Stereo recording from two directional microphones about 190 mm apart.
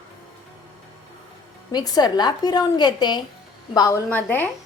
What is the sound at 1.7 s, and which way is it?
A woman's voice, 20° left (ahead or behind).